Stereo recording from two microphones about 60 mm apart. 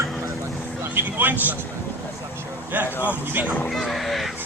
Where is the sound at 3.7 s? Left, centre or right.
Centre.